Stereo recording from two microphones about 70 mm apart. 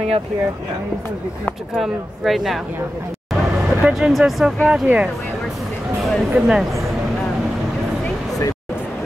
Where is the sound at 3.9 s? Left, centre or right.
Centre.